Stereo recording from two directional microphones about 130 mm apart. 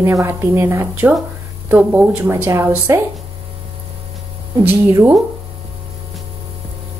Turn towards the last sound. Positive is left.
turn(degrees=-15)  # may be behind; listen again after turning